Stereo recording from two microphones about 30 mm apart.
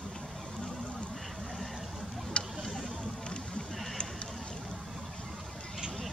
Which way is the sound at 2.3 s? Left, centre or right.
Left.